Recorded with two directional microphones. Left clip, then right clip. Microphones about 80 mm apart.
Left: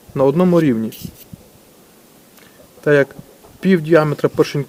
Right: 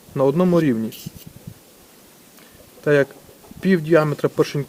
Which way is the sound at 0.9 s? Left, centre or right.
Centre.